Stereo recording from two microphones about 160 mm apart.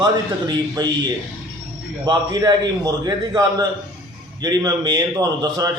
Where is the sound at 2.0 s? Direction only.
25° right (ahead or behind).